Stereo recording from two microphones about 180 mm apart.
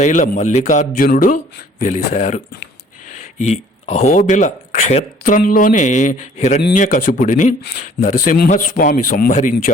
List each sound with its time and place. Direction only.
0.0 s speech: 40° left (ahead or behind)